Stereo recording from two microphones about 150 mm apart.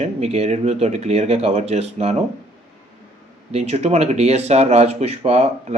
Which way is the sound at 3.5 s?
45° right (ahead or behind).